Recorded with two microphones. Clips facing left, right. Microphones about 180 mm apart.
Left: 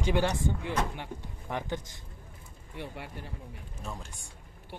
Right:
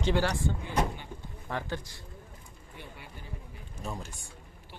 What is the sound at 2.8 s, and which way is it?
Speech, 80° left.